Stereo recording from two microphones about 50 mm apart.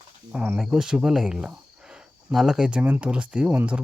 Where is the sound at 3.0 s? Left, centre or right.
Right.